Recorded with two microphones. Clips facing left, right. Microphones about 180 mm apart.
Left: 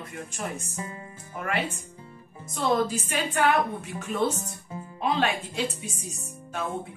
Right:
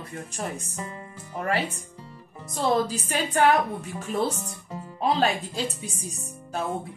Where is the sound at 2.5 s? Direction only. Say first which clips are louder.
Right 1 dB; 40° right (ahead or behind).